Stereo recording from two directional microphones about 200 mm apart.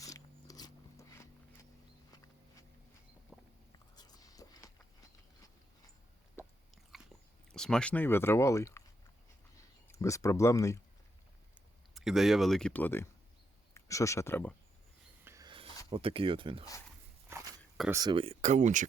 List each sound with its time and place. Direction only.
0.0 s zipper: 15° left (ahead or behind)
2.1 s a sound: 15° left (ahead or behind)
3.3 s a sound: centre (ahead or behind)
3.9 s a sound: 20° left (ahead or behind)
6.9 s dog: centre (ahead or behind)
7.5 s speech: 5° left (ahead or behind)
9.9 s speech: 15° left (ahead or behind)
11.9 s speech: centre (ahead or behind)
15.2 s filing: 15° right (ahead or behind)
15.9 s speech: 25° right (ahead or behind)
17.9 s speech: 20° right (ahead or behind); by 18.9 s 40° right (ahead or behind)